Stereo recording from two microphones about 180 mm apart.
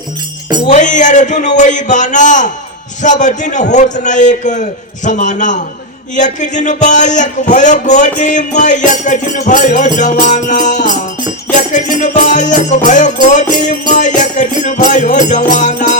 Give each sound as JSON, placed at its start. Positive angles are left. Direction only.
{"t": 0.7, "sound": "music", "side_deg": 45}